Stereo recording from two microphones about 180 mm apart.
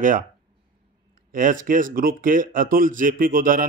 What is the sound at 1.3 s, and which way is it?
Speech, 50° right (ahead or behind).